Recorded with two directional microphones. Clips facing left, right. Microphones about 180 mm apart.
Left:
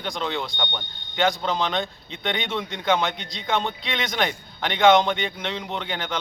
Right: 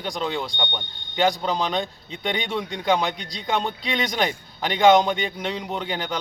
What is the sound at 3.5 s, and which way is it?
Speech, centre (ahead or behind).